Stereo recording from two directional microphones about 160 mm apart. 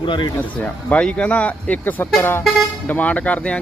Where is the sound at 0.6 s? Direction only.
10° left (ahead or behind).